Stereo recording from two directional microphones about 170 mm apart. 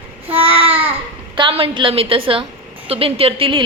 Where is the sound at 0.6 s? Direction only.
35° right (ahead or behind).